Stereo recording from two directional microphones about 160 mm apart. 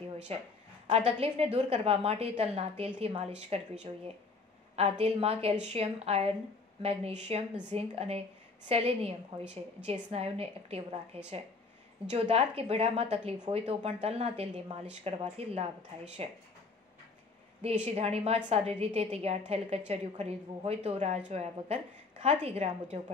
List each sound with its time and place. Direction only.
0.8 s a woman's voice: 40° right (ahead or behind)
12.1 s a woman's voice: 40° right (ahead or behind)
17.9 s a woman's voice: 40° right (ahead or behind)